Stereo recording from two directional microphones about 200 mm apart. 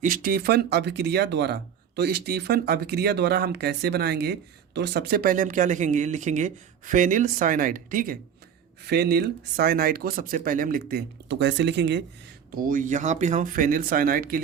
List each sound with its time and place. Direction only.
0.0 s speech: 45° right (ahead or behind); by 12.0 s 60° right (ahead or behind)
12.5 s speech: 45° right (ahead or behind)